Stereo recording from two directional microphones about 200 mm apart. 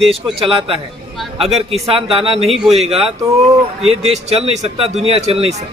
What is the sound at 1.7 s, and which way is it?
Speech, 30° right (ahead or behind).